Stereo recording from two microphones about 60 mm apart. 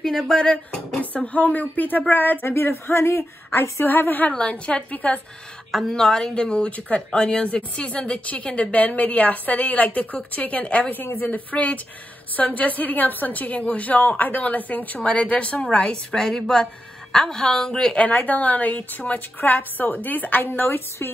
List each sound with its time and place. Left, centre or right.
0.0 s a woman's voice: centre
1.1 s speech: left
2.4 s speech: left
3.8 s a woman's voice: left
4.3 s speech: centre
5.7 s a woman's voice: centre
18.0 s speech: left